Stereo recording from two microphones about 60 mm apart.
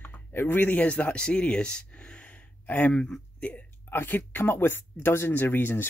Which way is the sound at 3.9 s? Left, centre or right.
Left.